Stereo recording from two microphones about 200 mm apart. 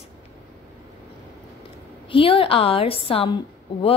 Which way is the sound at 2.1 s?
25° left (ahead or behind).